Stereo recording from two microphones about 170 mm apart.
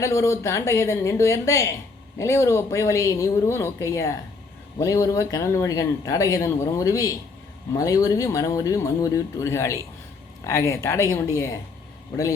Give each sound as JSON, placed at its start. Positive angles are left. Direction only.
{"t": 0.0, "sound": "speech", "side_deg": 15}